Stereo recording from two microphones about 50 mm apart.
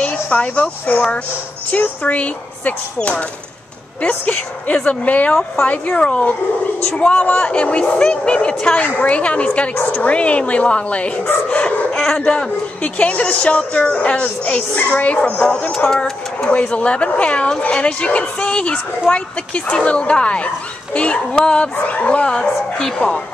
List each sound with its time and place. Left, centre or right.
0.0 s speech: left
4.3 s speech: left
7.1 s speech: left; by 8.8 s centre
8.8 s speech: left
9.1 s speech: left
16.4 s speech: left